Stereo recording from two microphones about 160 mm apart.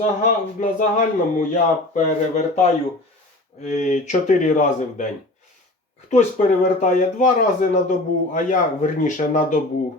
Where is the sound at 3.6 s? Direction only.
45° left (ahead or behind).